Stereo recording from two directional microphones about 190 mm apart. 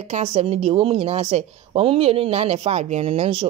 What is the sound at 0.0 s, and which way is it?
A woman's voice, 35° right (ahead or behind).